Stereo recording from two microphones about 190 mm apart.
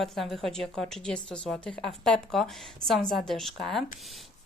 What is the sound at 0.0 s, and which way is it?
Speech, centre (ahead or behind).